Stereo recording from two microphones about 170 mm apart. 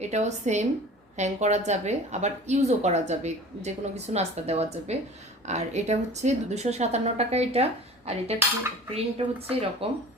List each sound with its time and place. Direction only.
0.0 s a woman's voice: 40° right (ahead or behind)